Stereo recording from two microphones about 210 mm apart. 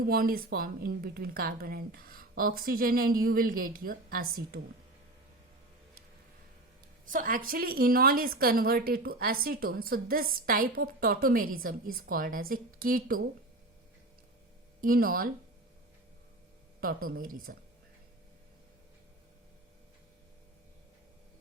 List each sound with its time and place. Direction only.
0.0 s a woman's voice: 45° right (ahead or behind)
7.0 s a woman's voice: 40° right (ahead or behind)
14.8 s a woman's voice: 45° right (ahead or behind)
16.8 s a woman's voice: 45° right (ahead or behind)